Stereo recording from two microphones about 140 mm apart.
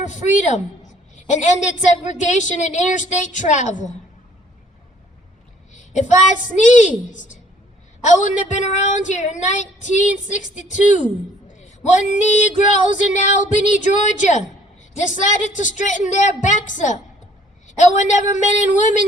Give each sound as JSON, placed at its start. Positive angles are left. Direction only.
{"t": 0.1, "sound": "female singing", "side_deg": 60}
{"t": 1.1, "sound": "a sound", "side_deg": 60}
{"t": 1.9, "sound": "female singing", "side_deg": 60}
{"t": 5.7, "sound": "a woman's voice", "side_deg": 60}
{"t": 7.1, "sound": "female singing", "side_deg": 65}
{"t": 11.5, "sound": "a sound", "side_deg": 60}
{"t": 12.2, "sound": "female singing", "side_deg": 60}